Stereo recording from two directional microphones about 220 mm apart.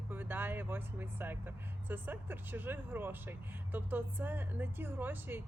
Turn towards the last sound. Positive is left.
turn(degrees=-10)  # may be behind; listen again after turning